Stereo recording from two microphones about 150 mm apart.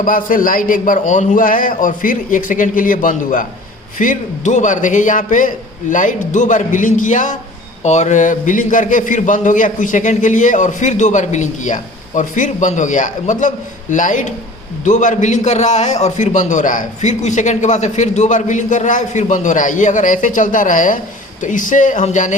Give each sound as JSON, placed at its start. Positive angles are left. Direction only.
{"t": 0.0, "sound": "a man's voice", "side_deg": 65}